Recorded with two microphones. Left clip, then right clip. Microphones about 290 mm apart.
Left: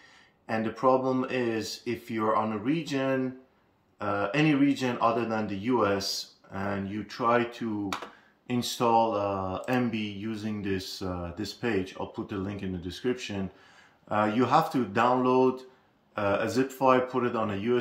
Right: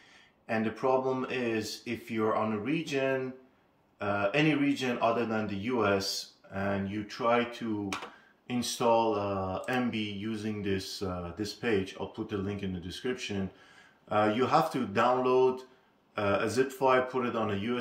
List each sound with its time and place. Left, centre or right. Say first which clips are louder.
0.5 s speech: left 4 dB; left
7.1 s speech: left 2 dB; left